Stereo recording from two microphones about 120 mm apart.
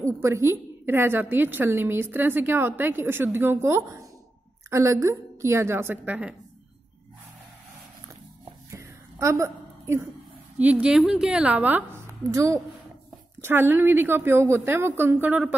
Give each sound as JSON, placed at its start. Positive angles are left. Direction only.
{"t": 0.0, "sound": "a woman's voice", "side_deg": -25}
{"t": 8.7, "sound": "a sound", "side_deg": -25}
{"t": 10.6, "sound": "a woman's voice", "side_deg": -10}
{"t": 12.2, "sound": "a woman's voice", "side_deg": -25}